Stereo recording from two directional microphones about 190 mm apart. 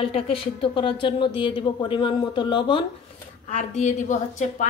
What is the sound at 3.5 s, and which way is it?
A woman's voice, 35° left (ahead or behind).